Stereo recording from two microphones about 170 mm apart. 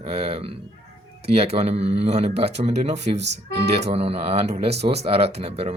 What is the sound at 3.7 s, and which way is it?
Speech, 40° right (ahead or behind).